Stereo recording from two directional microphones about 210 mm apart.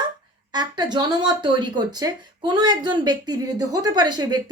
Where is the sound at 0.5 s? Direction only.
20° right (ahead or behind).